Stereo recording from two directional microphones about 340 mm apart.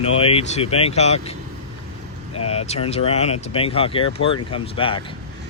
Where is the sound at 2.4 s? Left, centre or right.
Centre.